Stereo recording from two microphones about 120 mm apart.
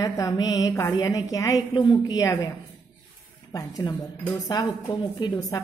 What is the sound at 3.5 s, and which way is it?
Speech, 35° left (ahead or behind).